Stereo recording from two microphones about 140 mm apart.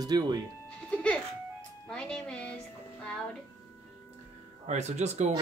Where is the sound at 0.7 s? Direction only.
10° left (ahead or behind).